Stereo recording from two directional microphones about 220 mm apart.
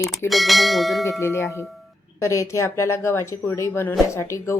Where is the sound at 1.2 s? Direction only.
10° left (ahead or behind).